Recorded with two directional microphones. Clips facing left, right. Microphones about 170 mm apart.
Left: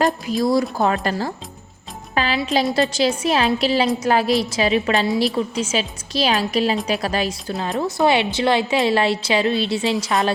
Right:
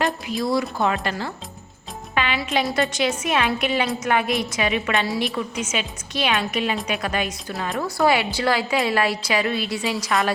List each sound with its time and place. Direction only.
0.0 s a woman's voice: 40° left (ahead or behind); by 10.3 s 25° left (ahead or behind)